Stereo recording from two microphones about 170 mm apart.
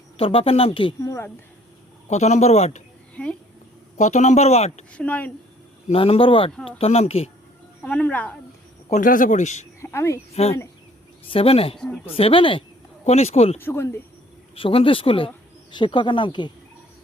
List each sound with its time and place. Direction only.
0.2 s speech: 35° left (ahead or behind)
1.0 s speech: 15° left (ahead or behind)
2.0 s speech: 40° left (ahead or behind)
3.9 s speech: 45° left (ahead or behind)
4.9 s speech: 10° left (ahead or behind)
5.9 s speech: 35° left (ahead or behind)
7.9 s speech: 10° left (ahead or behind)
8.9 s speech: 50° left (ahead or behind)
9.8 s speech: 15° left (ahead or behind)
10.4 s speech: 35° left (ahead or behind)
13.6 s speech: 15° left (ahead or behind)
14.5 s speech: 35° left (ahead or behind)